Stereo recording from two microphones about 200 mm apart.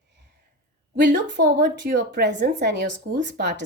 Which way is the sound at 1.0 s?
60° right (ahead or behind).